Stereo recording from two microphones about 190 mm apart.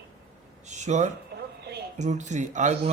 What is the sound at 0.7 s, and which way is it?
A man's voice, 40° right (ahead or behind).